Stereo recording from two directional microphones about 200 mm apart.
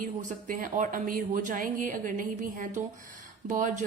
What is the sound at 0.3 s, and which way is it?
Speech, 45° right (ahead or behind).